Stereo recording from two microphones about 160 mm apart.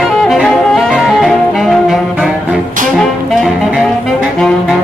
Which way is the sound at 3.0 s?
Centre (ahead or behind).